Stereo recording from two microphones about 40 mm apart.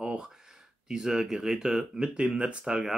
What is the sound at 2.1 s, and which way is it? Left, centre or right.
Speech, right.